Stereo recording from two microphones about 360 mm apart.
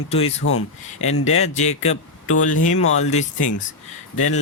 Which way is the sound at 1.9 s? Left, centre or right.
Left.